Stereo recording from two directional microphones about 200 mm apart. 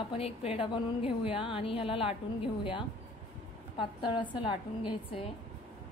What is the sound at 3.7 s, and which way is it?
A woman's voice, 25° left (ahead or behind).